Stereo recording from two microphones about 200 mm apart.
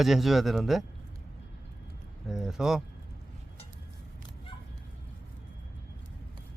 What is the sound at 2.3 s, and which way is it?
Speech, centre (ahead or behind).